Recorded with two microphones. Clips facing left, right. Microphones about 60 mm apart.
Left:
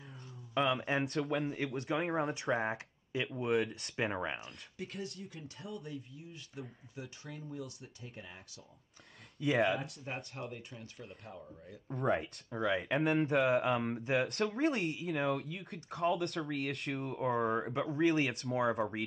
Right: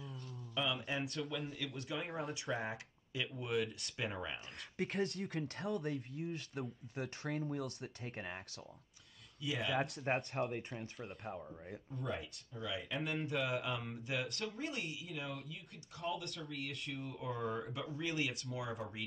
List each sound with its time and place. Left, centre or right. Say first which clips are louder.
0.6 s speech: left 7 dB; left
1.1 s speech: left 7 dB; left
2.5 s speech: left 5 dB; left
4.7 s speech: right 5 dB; right
9.4 s speech: left 9 dB; left
9.8 s speech: right 5 dB; right
10.4 s a man's voice: right 5 dB; right
11.9 s speech: left 10 dB; left
13.2 s speech: left 9 dB; left
14.2 s speech: left 10 dB; left
17.1 s speech: left 9 dB; left